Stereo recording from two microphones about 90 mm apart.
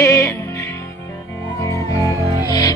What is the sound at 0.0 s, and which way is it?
Music, 35° left (ahead or behind).